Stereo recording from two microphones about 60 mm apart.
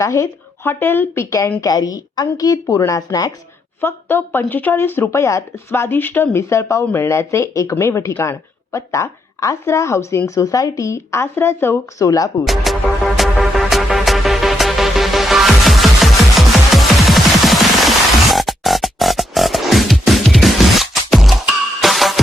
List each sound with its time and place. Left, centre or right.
0.0 s speech: left
0.6 s speech: left
1.6 s speech: left
3.8 s speech: left
5.1 s speech: left
5.9 s speech: left
6.3 s speech: left
6.9 s a woman's voice: left
12.0 s speech: left
12.7 s music: centre